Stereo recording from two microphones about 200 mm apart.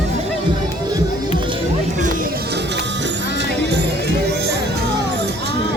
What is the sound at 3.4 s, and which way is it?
Music, 60° right (ahead or behind).